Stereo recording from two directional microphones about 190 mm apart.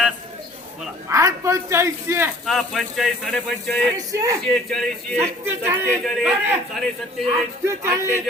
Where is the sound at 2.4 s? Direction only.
Centre (ahead or behind).